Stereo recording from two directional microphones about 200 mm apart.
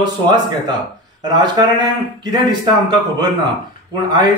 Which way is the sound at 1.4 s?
20° right (ahead or behind).